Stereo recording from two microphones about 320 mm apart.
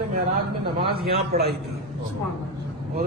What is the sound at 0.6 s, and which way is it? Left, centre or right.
Speech, centre.